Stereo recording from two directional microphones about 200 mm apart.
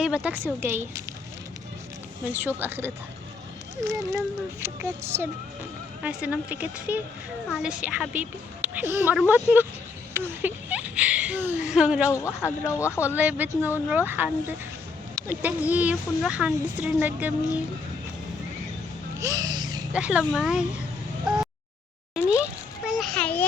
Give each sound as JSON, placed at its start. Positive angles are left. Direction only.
{"t": 0.0, "sound": "a woman's voice", "side_deg": -5}
{"t": 2.6, "sound": "a woman's voice", "side_deg": -10}
{"t": 12.1, "sound": "speech", "side_deg": 15}
{"t": 13.1, "sound": "a woman's voice", "side_deg": -10}
{"t": 19.2, "sound": "a sound", "side_deg": -20}
{"t": 19.9, "sound": "speech", "side_deg": -5}
{"t": 21.3, "sound": "fowl", "side_deg": 0}
{"t": 22.3, "sound": "a sound", "side_deg": -5}